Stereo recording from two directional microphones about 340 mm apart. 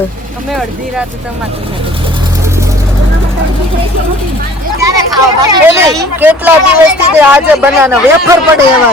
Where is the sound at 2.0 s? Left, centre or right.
Centre.